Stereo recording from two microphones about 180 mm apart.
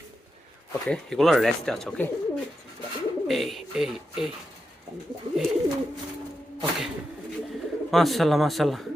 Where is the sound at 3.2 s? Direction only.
Centre (ahead or behind).